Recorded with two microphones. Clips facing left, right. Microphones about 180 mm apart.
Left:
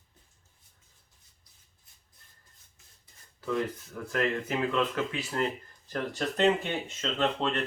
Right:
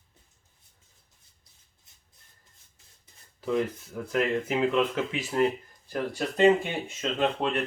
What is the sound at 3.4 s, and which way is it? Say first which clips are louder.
Speech: right 3 dB; 15° right (ahead or behind).